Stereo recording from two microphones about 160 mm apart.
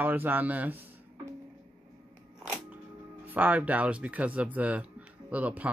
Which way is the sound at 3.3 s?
10° right (ahead or behind).